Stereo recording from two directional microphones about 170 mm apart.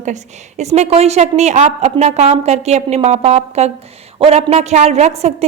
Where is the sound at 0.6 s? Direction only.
40° right (ahead or behind).